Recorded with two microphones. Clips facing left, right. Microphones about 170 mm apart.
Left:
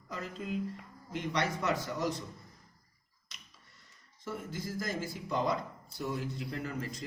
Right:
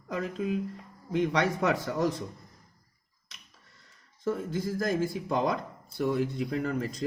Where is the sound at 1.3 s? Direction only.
60° right (ahead or behind).